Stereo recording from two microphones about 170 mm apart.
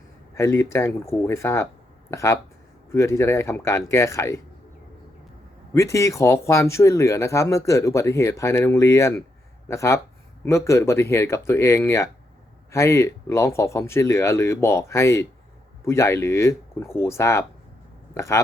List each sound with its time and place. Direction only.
0.3 s speech: 15° left (ahead or behind)
5.7 s speech: 15° left (ahead or behind)